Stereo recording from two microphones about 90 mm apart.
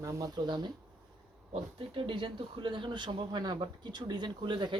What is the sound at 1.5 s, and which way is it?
Speech, 75° right (ahead or behind).